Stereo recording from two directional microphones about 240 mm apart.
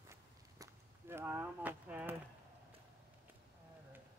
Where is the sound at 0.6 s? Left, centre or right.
Centre.